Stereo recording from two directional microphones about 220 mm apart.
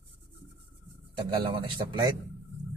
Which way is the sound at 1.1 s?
20° right (ahead or behind).